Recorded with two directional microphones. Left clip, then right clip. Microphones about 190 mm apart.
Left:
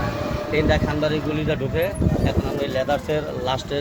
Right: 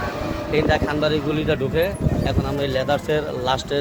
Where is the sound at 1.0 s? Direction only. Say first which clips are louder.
Right 2 dB; 10° right (ahead or behind).